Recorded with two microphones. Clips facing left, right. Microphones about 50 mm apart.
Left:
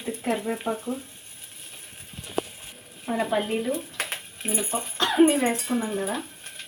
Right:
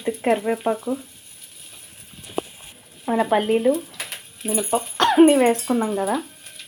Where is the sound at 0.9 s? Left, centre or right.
Right.